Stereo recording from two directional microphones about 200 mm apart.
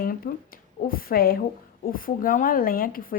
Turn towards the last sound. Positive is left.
turn(degrees=45)  # may be behind; listen again after turning